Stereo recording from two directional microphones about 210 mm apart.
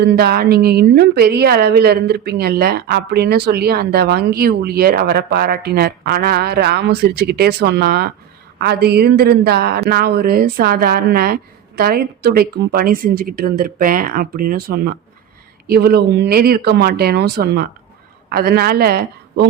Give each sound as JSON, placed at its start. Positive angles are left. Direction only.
{"t": 0.0, "sound": "a woman's voice", "side_deg": -50}